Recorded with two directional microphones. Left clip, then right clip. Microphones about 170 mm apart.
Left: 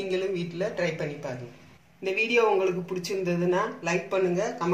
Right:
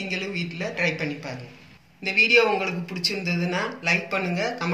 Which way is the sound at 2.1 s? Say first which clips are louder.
Right 5 dB; 55° left (ahead or behind).